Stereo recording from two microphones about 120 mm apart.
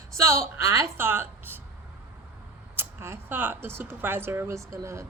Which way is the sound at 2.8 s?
20° right (ahead or behind).